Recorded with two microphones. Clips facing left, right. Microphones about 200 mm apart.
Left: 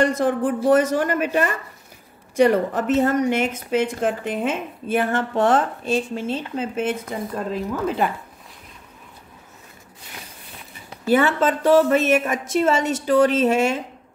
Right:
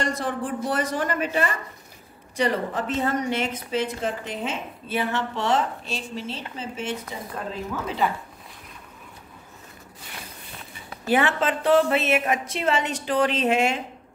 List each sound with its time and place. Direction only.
0.0 s a woman's voice: 50° left (ahead or behind)
11.1 s a woman's voice: 45° left (ahead or behind)